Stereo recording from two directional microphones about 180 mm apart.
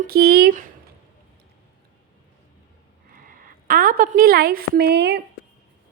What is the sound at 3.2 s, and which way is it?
A woman's voice, 50° right (ahead or behind).